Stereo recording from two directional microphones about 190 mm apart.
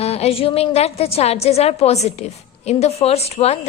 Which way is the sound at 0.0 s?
30° left (ahead or behind).